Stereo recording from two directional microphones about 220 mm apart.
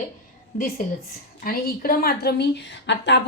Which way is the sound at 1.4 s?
40° left (ahead or behind).